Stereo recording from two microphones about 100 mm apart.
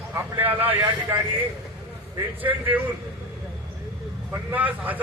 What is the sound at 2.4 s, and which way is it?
Speech, 20° right (ahead or behind).